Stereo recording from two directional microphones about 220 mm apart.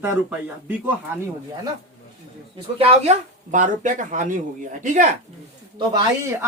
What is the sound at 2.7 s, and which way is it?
Speech, 30° right (ahead or behind).